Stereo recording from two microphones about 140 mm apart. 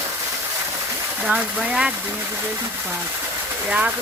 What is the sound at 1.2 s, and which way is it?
Speech, 5° right (ahead or behind).